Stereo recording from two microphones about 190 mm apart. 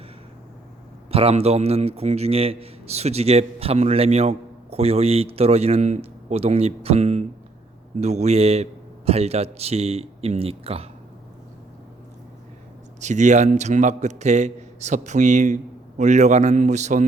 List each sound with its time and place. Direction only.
1.1 s a man's voice: 30° right (ahead or behind)
13.0 s a man's voice: 40° right (ahead or behind)